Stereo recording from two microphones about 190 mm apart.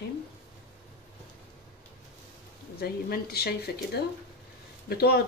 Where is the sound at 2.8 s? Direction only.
55° left (ahead or behind).